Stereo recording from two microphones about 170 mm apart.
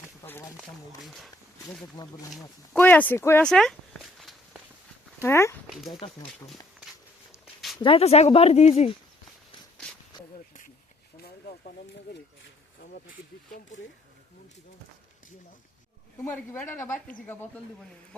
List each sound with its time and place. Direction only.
0.2 s a sound: 10° left (ahead or behind)
1.0 s speech: centre (ahead or behind)
2.0 s speech: 25° left (ahead or behind)
2.7 s speech: 10° left (ahead or behind)
5.2 s a woman's voice: 15° left (ahead or behind)
5.6 s speech: centre (ahead or behind)
7.8 s speech: 35° left (ahead or behind)
16.2 s a woman's voice: 10° left (ahead or behind)